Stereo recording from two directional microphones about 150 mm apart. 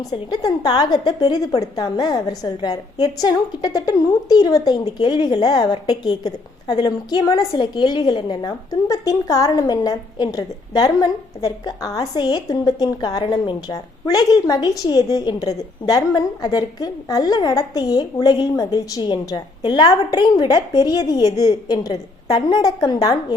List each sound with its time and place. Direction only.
0.1 s a woman's voice: 30° left (ahead or behind)